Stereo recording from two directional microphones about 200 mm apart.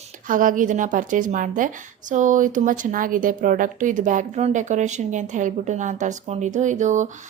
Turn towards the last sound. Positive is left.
turn(degrees=-35)  # may be behind; listen again after turning